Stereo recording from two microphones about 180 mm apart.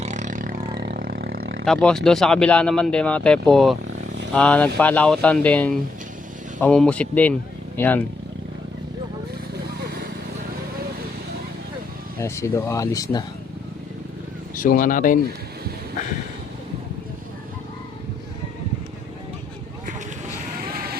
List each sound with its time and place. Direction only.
0.0 s vehicle: 40° right (ahead or behind); by 1.6 s 75° right (ahead or behind)
1.6 s speech: 5° left (ahead or behind)
9.8 s vehicle: 55° right (ahead or behind)
12.2 s speech: 15° left (ahead or behind)
14.5 s speech: 50° left (ahead or behind)